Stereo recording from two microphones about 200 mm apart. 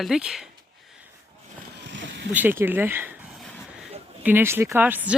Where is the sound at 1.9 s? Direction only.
65° right (ahead or behind).